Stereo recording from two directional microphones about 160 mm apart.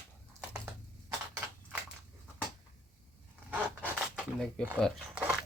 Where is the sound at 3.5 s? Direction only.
10° right (ahead or behind).